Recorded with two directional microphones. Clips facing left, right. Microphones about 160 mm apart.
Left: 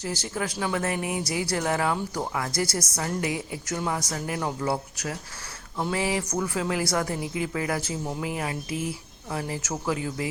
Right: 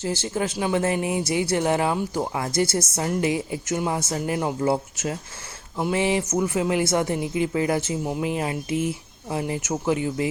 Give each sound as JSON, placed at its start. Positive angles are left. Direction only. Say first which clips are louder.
{"t": 0.0, "sound": "speech", "louder": "right 5 dB", "side_deg": -25}